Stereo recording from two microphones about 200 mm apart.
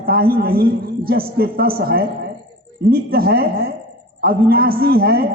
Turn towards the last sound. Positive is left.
turn(degrees=-50)  # may be behind; listen again after turning